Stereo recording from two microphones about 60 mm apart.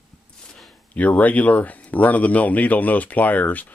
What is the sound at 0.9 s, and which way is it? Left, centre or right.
Speech, left.